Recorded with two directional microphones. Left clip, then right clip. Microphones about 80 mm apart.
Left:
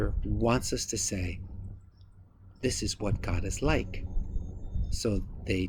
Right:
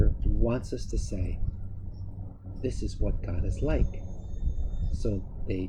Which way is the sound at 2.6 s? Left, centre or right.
Left.